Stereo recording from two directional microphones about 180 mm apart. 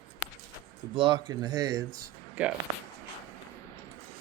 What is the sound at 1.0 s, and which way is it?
Speech, 25° right (ahead or behind).